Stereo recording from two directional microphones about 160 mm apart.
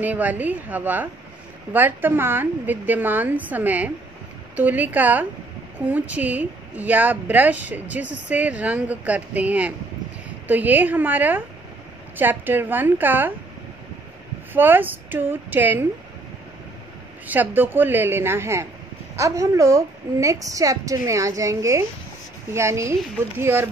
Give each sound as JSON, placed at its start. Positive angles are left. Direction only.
{"t": 0.0, "sound": "a woman's voice", "side_deg": -10}
{"t": 14.5, "sound": "a woman's voice", "side_deg": -10}
{"t": 17.3, "sound": "a woman's voice", "side_deg": -10}